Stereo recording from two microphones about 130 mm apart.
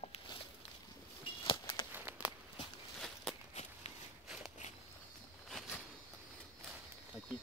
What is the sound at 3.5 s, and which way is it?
Walk, 55° left (ahead or behind).